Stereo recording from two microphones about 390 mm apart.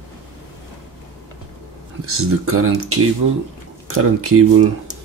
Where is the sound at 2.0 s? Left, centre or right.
Right.